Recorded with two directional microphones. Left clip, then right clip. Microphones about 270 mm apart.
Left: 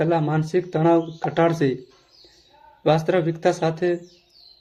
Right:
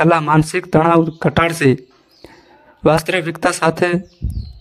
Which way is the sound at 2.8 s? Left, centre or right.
Right.